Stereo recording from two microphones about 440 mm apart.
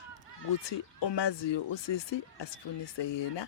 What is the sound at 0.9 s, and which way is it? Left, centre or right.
Speech, left.